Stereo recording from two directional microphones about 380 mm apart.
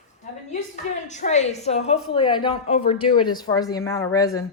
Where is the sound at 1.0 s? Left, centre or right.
Centre.